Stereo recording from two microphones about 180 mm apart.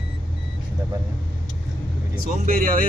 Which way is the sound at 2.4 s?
50° right (ahead or behind).